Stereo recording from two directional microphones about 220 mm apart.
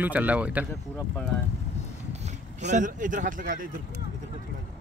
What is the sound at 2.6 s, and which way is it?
Speech, 35° right (ahead or behind).